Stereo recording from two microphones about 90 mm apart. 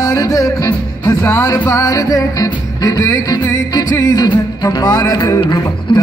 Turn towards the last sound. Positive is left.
turn(degrees=65)  # may be behind; listen again after turning